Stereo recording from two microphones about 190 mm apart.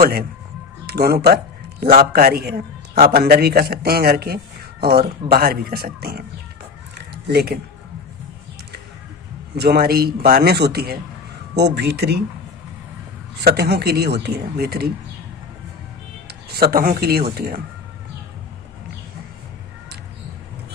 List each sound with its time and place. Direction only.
0.0 s a man's voice: 50° right (ahead or behind)
7.3 s a man's voice: 55° right (ahead or behind)
9.6 s a man's voice: 55° right (ahead or behind)
13.4 s a man's voice: 60° right (ahead or behind)
16.2 s speech: 55° right (ahead or behind)